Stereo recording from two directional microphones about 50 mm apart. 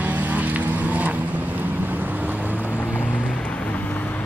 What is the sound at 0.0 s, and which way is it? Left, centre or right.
Vehicle, right.